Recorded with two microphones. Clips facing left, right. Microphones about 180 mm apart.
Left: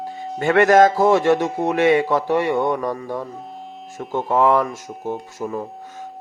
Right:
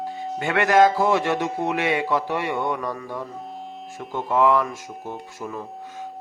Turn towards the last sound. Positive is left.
turn(degrees=40)  # may be behind; listen again after turning